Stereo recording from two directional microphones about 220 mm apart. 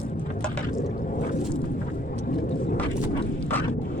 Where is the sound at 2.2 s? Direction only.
40° left (ahead or behind).